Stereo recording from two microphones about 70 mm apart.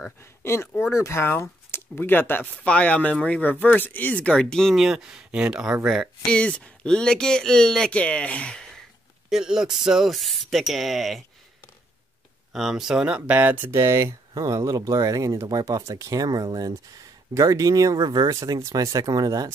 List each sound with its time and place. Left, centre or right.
0.2 s speech: left; by 4.7 s centre
4.7 s speech: centre
6.2 s speech: centre
9.3 s speech: centre
12.5 s speech: centre; by 14.1 s right
14.3 s speech: right
15.4 s speech: right
17.3 s speech: right
19.0 s speech: right